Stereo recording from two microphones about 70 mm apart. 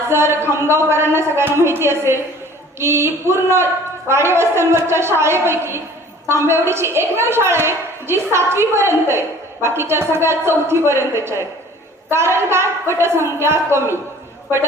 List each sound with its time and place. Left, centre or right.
0.1 s a woman's voice: right